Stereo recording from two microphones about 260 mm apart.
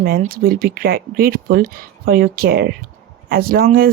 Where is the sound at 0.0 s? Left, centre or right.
Right.